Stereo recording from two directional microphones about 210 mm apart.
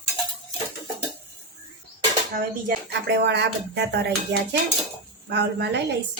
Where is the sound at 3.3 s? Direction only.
55° right (ahead or behind).